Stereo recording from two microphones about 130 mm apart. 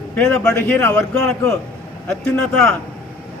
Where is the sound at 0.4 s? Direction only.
15° left (ahead or behind).